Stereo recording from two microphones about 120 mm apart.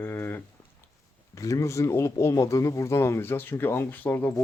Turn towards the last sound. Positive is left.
turn(degrees=15)  # may be behind; listen again after turning